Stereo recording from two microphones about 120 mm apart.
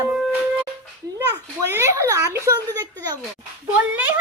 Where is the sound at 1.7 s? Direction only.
25° right (ahead or behind).